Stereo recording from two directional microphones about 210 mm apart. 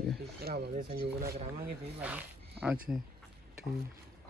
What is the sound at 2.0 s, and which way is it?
Speech, 5° right (ahead or behind).